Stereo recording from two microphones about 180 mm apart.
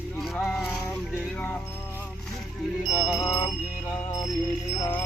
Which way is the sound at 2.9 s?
15° left (ahead or behind).